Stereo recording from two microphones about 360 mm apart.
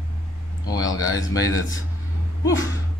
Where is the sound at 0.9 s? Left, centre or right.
Centre.